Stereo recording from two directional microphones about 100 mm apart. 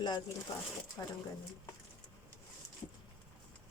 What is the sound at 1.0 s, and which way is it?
Speech, 35° left (ahead or behind).